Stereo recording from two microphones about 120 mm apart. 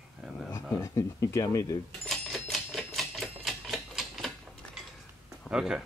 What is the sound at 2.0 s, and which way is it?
Typewriter, centre (ahead or behind).